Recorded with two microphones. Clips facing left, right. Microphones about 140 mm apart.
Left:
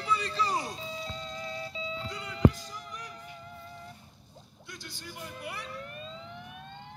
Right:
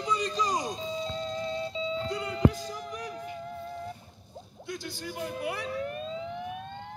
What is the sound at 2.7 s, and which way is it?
Music, 50° right (ahead or behind).